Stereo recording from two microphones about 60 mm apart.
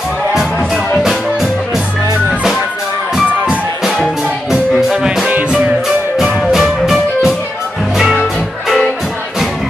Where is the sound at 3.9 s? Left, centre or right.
Centre.